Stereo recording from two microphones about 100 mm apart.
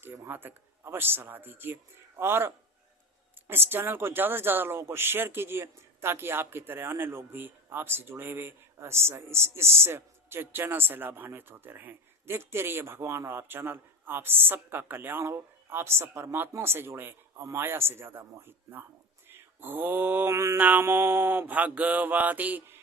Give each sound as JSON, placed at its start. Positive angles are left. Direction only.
{"t": 0.0, "sound": "speech", "side_deg": -20}
{"t": 19.3, "sound": "mantra", "side_deg": -20}
{"t": 20.6, "sound": "mantra", "side_deg": -20}